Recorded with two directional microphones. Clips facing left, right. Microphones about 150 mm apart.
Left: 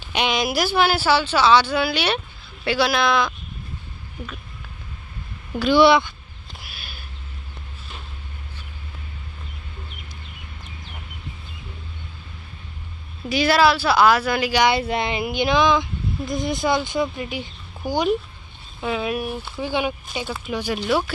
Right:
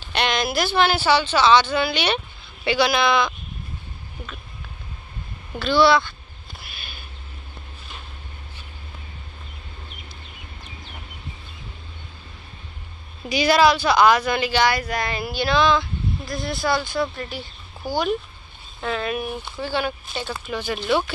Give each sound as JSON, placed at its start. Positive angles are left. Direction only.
{"t": 0.0, "sound": "speech", "side_deg": 10}
{"t": 5.5, "sound": "speech", "side_deg": 15}
{"t": 6.7, "sound": "a sound", "side_deg": 5}
{"t": 13.2, "sound": "speech", "side_deg": 0}
{"t": 14.7, "sound": "speech", "side_deg": 25}
{"t": 18.8, "sound": "speech", "side_deg": 5}
{"t": 19.6, "sound": "speech", "side_deg": 15}